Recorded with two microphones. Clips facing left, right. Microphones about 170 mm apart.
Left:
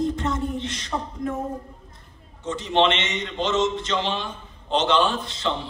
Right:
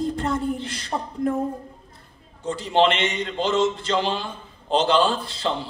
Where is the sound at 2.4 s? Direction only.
35° right (ahead or behind).